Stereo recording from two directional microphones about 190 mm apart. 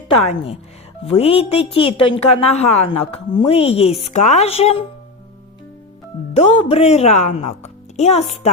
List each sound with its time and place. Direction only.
0.3 s a woman's voice: 30° left (ahead or behind)
6.3 s a woman's voice: 30° left (ahead or behind)